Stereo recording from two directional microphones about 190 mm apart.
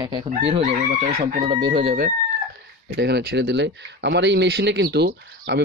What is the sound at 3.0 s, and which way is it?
Speech, 60° right (ahead or behind).